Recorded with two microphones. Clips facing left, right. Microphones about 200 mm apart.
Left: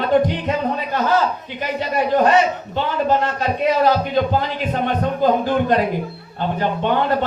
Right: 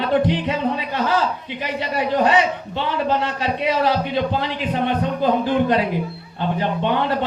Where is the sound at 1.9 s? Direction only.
45° left (ahead or behind).